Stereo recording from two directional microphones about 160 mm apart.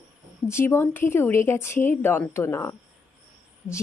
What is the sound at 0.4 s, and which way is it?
Speech, 15° left (ahead or behind).